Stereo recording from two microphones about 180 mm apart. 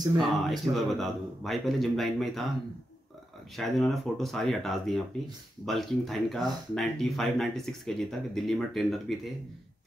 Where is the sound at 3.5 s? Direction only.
Centre (ahead or behind).